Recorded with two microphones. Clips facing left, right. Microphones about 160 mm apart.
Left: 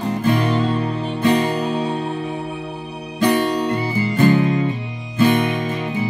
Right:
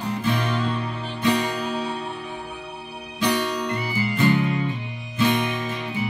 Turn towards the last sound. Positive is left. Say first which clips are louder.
# left 6 dB
turn(degrees=50)  # may be behind; listen again after turning